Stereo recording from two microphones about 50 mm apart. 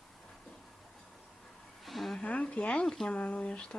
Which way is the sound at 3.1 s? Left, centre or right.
Left.